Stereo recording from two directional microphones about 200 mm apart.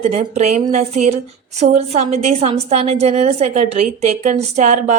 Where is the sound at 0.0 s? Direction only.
35° right (ahead or behind).